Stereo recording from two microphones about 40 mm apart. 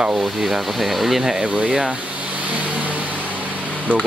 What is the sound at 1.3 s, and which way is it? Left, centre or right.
Speech, right.